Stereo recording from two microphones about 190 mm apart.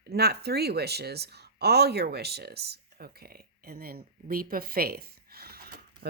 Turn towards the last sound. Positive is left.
turn(degrees=-55)  # may be behind; listen again after turning